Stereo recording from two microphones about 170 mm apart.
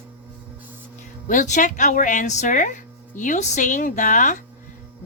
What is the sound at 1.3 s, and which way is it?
Speech, 45° left (ahead or behind).